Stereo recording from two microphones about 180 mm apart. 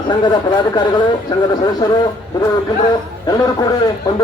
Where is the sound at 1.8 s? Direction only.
20° left (ahead or behind).